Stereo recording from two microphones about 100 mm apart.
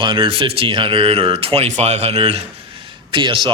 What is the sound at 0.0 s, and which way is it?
Speech, 55° right (ahead or behind).